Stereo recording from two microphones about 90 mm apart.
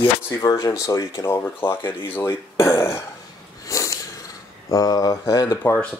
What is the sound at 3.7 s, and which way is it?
Sniff, 35° left (ahead or behind).